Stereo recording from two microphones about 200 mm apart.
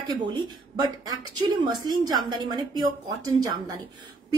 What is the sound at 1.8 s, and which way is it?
A woman's voice, 20° right (ahead or behind).